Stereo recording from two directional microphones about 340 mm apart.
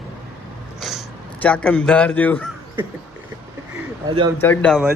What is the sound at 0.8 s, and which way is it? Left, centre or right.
Speech, centre.